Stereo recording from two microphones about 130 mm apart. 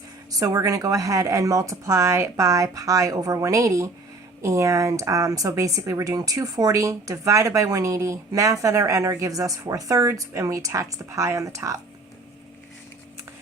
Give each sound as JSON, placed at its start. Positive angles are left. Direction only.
{"t": 0.3, "sound": "speech", "side_deg": -25}